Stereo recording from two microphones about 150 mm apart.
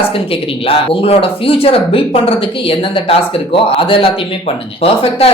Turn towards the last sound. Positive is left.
turn(degrees=40)  # may be behind; listen again after turning